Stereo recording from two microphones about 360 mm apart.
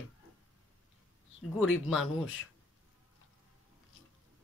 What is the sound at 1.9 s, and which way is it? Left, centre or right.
Speech, centre.